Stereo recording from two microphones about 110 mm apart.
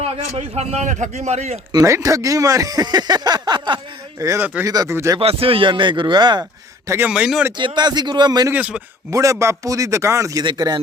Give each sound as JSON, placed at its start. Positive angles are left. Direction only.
{"t": 0.0, "sound": "a man's voice", "side_deg": -75}
{"t": 1.7, "sound": "speech", "side_deg": -30}
{"t": 4.2, "sound": "a man's voice", "side_deg": -30}
{"t": 4.9, "sound": "a man's voice", "side_deg": -25}
{"t": 5.2, "sound": "speech", "side_deg": -60}
{"t": 6.8, "sound": "speech", "side_deg": -25}
{"t": 7.1, "sound": "speech", "side_deg": -10}
{"t": 7.6, "sound": "speech", "side_deg": -40}
{"t": 8.5, "sound": "speech", "side_deg": -10}
{"t": 9.0, "sound": "a man's voice", "side_deg": -30}
{"t": 10.4, "sound": "speech", "side_deg": -40}